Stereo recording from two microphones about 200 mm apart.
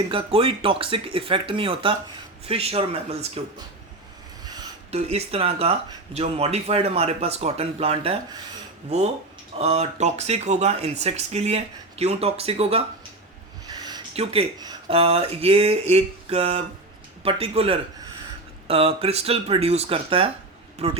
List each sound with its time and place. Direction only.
0.1 s speech: 30° right (ahead or behind)
4.9 s speech: 30° right (ahead or behind)
13.7 s a sound: 20° right (ahead or behind)
14.6 s a man's voice: 25° right (ahead or behind)